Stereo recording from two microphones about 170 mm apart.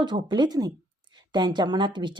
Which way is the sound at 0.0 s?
30° right (ahead or behind).